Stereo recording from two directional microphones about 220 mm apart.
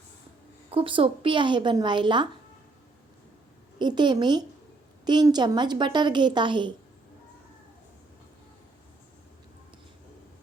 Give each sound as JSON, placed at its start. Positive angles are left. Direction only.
{"t": 0.7, "sound": "a woman's voice", "side_deg": -25}
{"t": 3.8, "sound": "a woman's voice", "side_deg": -20}